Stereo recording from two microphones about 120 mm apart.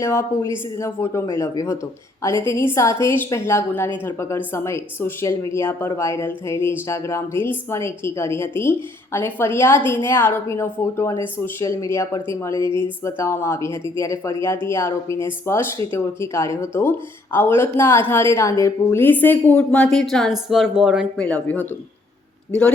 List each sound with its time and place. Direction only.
0.0 s a woman's voice: 20° left (ahead or behind); by 21.1 s 5° right (ahead or behind)
21.2 s speech: 10° left (ahead or behind)